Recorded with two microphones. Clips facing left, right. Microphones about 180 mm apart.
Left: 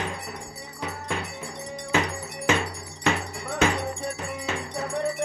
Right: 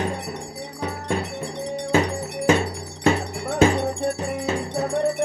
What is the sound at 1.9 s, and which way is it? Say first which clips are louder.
Music: right 5 dB; 30° right (ahead or behind).